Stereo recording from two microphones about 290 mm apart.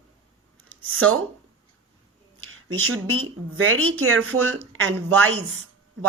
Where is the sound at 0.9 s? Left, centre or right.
Right.